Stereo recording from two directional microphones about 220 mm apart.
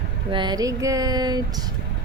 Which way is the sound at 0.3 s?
20° right (ahead or behind).